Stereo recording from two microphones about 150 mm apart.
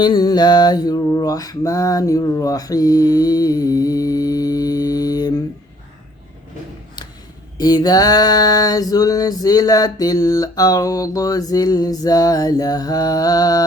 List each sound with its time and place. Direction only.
0.0 s male singing: 30° left (ahead or behind)
7.6 s male singing: 25° left (ahead or behind)